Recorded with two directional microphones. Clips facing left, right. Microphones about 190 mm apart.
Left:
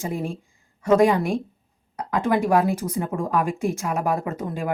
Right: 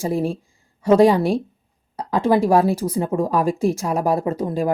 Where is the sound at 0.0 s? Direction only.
35° right (ahead or behind).